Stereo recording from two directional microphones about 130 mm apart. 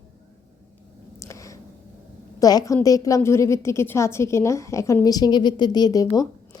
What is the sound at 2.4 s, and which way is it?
A woman's voice, 30° left (ahead or behind).